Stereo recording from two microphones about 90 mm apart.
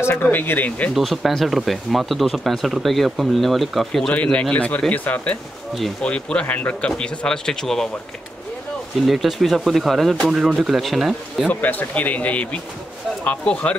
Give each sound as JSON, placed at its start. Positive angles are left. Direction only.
{"t": 0.0, "sound": "speech", "side_deg": 25}
{"t": 0.9, "sound": "speech", "side_deg": 0}
{"t": 4.1, "sound": "speech", "side_deg": 15}
{"t": 9.0, "sound": "speech", "side_deg": 0}
{"t": 11.4, "sound": "speech", "side_deg": 20}